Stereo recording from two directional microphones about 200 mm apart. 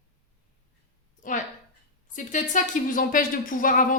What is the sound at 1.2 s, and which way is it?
Speech, 40° left (ahead or behind).